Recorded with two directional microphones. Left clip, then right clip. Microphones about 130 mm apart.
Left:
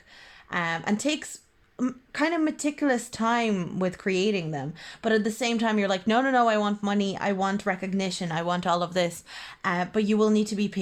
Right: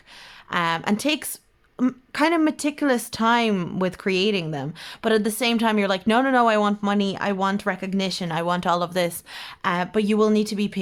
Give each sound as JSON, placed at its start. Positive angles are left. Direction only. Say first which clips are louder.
{"t": 0.5, "sound": "speech", "louder": "right 5 dB", "side_deg": -35}